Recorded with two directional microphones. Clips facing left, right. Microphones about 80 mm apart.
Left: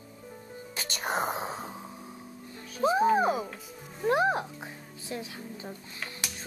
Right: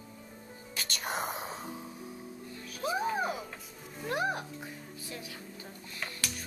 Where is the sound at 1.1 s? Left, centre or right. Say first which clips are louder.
Left 6 dB; left.